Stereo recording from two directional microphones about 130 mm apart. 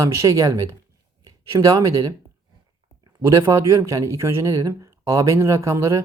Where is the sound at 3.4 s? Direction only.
25° right (ahead or behind).